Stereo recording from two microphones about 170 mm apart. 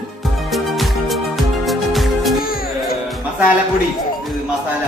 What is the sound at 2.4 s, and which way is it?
Music, 60° left (ahead or behind).